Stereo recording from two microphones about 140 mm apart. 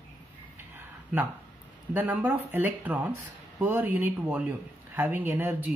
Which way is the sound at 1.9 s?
10° right (ahead or behind).